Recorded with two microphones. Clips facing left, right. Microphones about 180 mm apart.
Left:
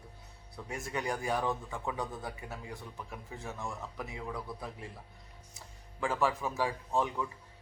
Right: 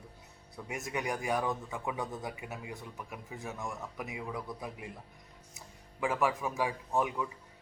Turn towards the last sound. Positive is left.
turn(degrees=-15)  # may be behind; listen again after turning